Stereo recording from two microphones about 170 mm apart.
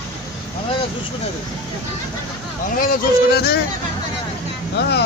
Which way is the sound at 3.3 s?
70° left (ahead or behind).